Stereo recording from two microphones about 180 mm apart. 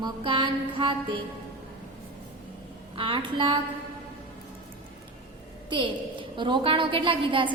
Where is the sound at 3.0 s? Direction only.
30° right (ahead or behind).